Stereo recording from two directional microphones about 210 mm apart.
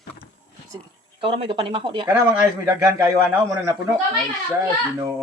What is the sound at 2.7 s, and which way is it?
A man's voice, 10° right (ahead or behind).